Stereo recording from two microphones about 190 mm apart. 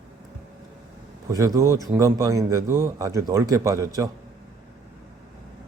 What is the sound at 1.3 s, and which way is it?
A man's voice, 20° right (ahead or behind).